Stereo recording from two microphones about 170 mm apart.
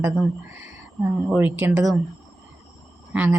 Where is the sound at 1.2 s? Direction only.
10° right (ahead or behind).